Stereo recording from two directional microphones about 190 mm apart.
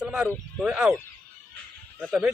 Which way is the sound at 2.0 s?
5° right (ahead or behind).